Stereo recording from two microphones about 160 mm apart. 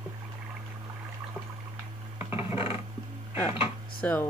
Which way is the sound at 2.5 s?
35° left (ahead or behind).